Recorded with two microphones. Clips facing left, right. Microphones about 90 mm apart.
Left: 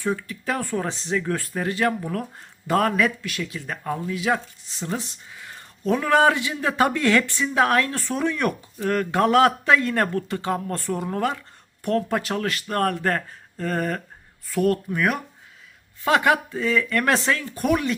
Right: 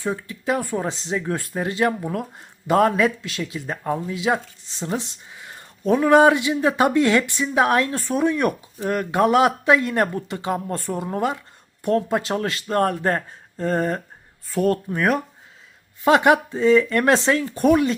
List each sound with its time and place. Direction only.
0.0 s speech: 25° right (ahead or behind)
16.0 s speech: 25° right (ahead or behind)